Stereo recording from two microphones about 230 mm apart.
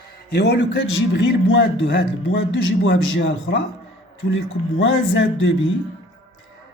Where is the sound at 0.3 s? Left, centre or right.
Left.